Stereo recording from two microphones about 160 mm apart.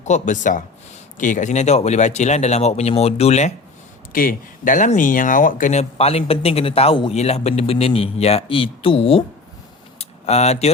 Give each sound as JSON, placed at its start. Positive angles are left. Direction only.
{"t": 0.0, "sound": "speech", "side_deg": 50}
{"t": 4.1, "sound": "speech", "side_deg": 60}
{"t": 10.0, "sound": "a sound", "side_deg": 45}